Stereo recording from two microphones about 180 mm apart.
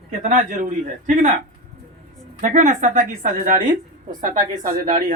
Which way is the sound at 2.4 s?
40° right (ahead or behind).